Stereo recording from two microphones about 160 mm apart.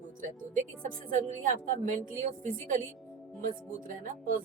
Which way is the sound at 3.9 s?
55° right (ahead or behind).